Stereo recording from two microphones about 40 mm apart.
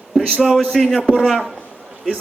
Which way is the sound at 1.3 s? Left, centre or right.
Centre.